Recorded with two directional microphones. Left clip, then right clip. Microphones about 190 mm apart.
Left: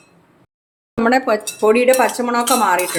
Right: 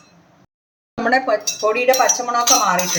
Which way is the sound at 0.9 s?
30° left (ahead or behind).